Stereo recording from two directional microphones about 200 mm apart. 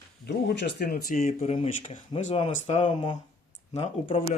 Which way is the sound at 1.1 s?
35° left (ahead or behind).